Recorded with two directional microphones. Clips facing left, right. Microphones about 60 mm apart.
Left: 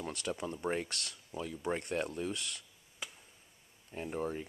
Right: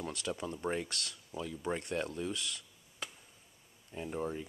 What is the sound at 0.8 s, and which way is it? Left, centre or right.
Speech, left.